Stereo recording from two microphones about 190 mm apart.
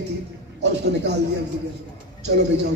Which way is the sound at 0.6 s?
65° right (ahead or behind).